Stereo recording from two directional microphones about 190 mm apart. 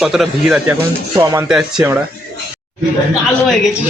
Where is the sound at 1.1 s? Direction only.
15° right (ahead or behind).